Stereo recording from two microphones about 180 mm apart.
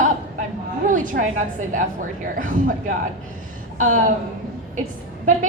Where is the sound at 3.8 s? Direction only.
45° right (ahead or behind).